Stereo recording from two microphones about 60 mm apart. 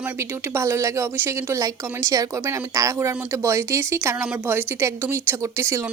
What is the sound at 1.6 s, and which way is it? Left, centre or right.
Speech, right.